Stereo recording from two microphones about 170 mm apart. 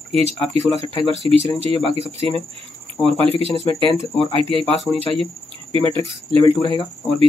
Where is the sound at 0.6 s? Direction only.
35° right (ahead or behind).